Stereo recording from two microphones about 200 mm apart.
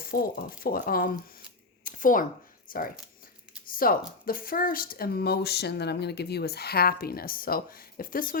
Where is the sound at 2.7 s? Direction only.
45° left (ahead or behind).